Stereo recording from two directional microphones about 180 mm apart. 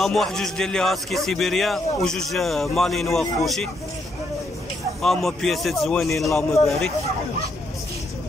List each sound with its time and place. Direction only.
0.0 s a man's voice: centre (ahead or behind)
5.0 s a man's voice: centre (ahead or behind)
6.3 s a man's voice: 15° left (ahead or behind)